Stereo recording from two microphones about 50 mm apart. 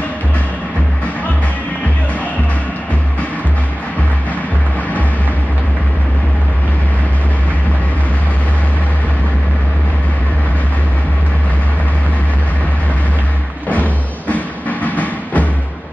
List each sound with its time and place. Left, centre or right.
13.7 s music: left